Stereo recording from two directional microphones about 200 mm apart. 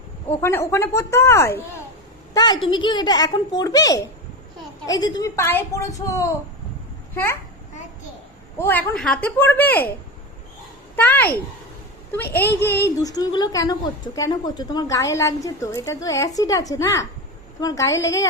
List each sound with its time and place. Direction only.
0.3 s a woman's voice: 15° left (ahead or behind)
8.5 s a woman's voice: 10° left (ahead or behind)
10.9 s a woman's voice: 10° left (ahead or behind)
12.4 s a woman's voice: 10° left (ahead or behind)